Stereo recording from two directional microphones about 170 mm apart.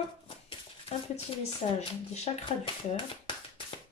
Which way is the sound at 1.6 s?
35° left (ahead or behind).